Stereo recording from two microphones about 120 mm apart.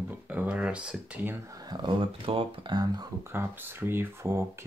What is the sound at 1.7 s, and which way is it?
Speech, 40° right (ahead or behind).